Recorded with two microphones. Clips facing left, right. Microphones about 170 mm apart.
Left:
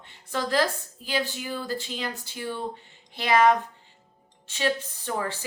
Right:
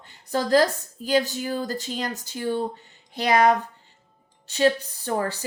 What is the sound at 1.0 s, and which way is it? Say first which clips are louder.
A woman's voice: right 7 dB; 40° right (ahead or behind).